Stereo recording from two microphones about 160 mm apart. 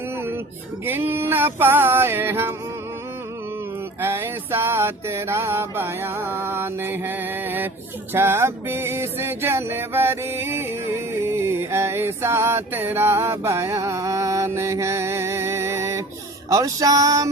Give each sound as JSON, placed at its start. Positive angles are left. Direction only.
{"t": 0.9, "sound": "music", "side_deg": -15}
{"t": 4.0, "sound": "music", "side_deg": -15}
{"t": 16.5, "sound": "a sound", "side_deg": -20}